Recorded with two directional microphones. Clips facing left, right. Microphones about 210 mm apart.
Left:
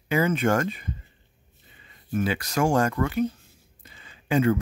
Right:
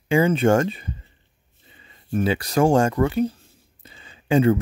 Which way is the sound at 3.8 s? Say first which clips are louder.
Right 3 dB; 30° right (ahead or behind).